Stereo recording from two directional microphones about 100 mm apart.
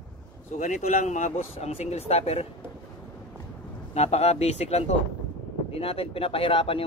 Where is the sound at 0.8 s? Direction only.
90° left.